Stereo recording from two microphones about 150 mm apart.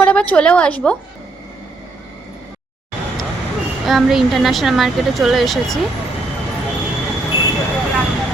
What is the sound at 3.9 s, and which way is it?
A woman's voice, centre (ahead or behind).